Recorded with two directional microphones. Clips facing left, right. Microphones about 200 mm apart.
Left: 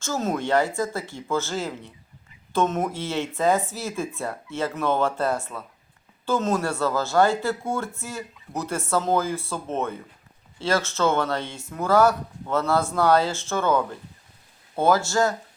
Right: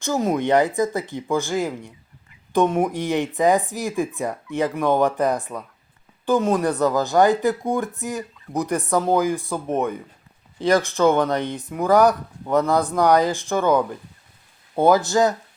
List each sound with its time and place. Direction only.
0.0 s speech: 15° right (ahead or behind)